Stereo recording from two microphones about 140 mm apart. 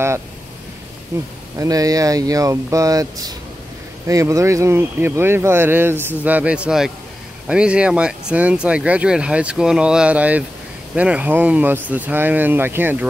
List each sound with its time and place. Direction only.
1.1 s speech: 20° right (ahead or behind)